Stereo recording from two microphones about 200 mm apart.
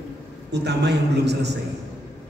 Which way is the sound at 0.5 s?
55° right (ahead or behind).